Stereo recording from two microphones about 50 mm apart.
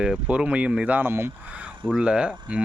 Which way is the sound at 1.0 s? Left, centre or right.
Right.